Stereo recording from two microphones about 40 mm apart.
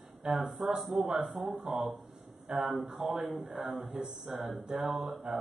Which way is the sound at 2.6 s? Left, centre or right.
Centre.